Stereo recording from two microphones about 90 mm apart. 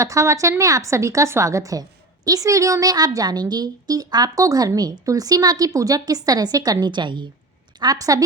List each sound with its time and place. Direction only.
0.0 s a woman's voice: 35° right (ahead or behind); by 7.3 s 60° right (ahead or behind)
7.8 s a woman's voice: 45° right (ahead or behind)